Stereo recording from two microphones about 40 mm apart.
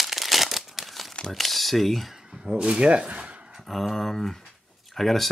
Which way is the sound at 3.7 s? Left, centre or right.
Centre.